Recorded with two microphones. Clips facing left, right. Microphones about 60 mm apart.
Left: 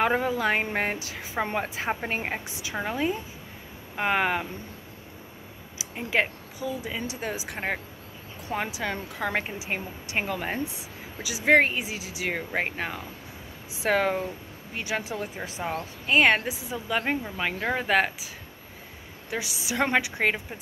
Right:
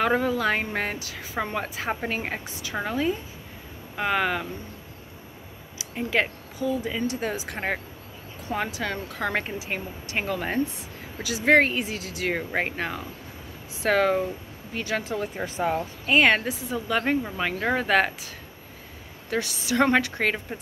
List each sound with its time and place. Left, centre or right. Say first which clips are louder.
0.0 s speech: right 1 dB; centre
5.8 s speech: right 1 dB; centre
8.5 s speech: right 1 dB; centre
12.4 s speech: even; centre
12.6 s speech: right 2 dB; centre
15.3 s speech: right 5 dB; centre
19.3 s speech: right 5 dB; centre